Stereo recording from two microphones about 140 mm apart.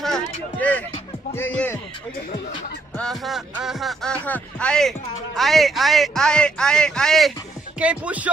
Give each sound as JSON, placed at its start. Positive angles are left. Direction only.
{"t": 0.0, "sound": "speech", "side_deg": 5}
{"t": 3.0, "sound": "music", "side_deg": 0}
{"t": 7.8, "sound": "speech", "side_deg": -10}